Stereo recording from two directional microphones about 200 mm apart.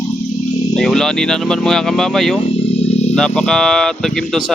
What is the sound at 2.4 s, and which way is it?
Guitar, 25° left (ahead or behind).